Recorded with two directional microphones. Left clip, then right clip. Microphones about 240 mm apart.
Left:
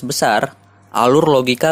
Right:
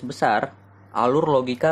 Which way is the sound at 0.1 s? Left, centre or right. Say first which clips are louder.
Left 5 dB; left.